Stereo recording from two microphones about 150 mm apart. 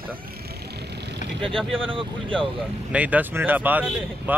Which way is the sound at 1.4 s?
5° left (ahead or behind).